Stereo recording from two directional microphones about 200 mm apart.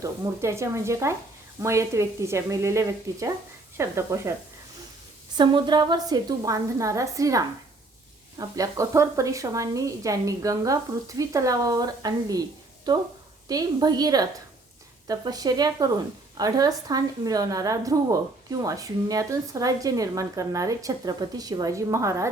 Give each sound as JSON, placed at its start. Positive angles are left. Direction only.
{"t": 0.0, "sound": "speech", "side_deg": -15}
{"t": 5.4, "sound": "speech", "side_deg": -20}